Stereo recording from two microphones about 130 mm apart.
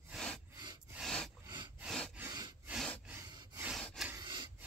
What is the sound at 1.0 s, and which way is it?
Snort, 5° left (ahead or behind).